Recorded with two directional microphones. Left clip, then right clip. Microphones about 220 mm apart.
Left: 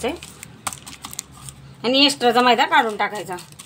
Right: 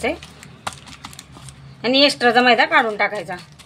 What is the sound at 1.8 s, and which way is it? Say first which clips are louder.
A woman's voice: right 2 dB; 10° right (ahead or behind).